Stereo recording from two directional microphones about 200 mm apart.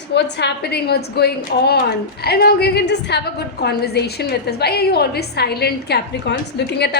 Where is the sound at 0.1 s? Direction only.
60° left (ahead or behind).